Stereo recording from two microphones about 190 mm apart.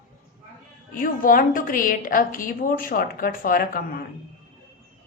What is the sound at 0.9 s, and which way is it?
A woman's voice, 45° left (ahead or behind).